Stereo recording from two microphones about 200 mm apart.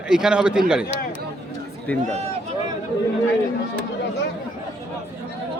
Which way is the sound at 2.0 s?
35° right (ahead or behind).